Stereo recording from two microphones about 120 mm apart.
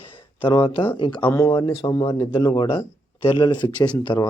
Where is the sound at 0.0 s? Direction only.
50° left (ahead or behind).